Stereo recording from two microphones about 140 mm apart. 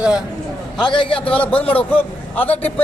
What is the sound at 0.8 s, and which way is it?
Speech, 35° left (ahead or behind).